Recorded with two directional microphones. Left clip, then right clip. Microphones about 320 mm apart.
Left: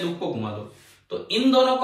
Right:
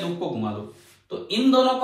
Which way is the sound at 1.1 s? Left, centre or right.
Centre.